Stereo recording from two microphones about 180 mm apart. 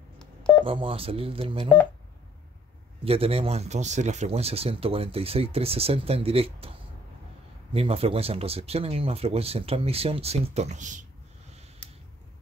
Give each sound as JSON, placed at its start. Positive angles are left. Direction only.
{"t": 0.2, "sound": "telephone dialing", "side_deg": 5}
{"t": 0.7, "sound": "speech", "side_deg": -30}
{"t": 3.0, "sound": "speech", "side_deg": -35}
{"t": 7.7, "sound": "speech", "side_deg": -35}